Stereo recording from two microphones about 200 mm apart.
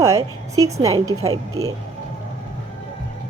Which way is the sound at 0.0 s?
15° right (ahead or behind).